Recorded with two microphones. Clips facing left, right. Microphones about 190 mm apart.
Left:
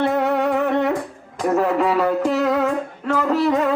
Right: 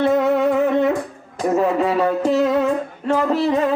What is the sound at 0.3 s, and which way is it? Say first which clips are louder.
Music: right 3 dB; 40° right (ahead or behind).